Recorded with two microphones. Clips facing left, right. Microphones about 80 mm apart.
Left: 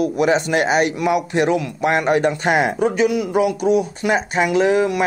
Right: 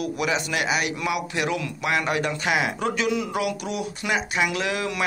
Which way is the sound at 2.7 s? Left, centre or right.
Centre.